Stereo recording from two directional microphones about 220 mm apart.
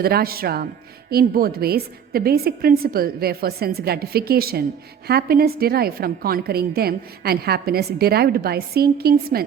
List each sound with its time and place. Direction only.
0.0 s a woman's voice: 45° right (ahead or behind)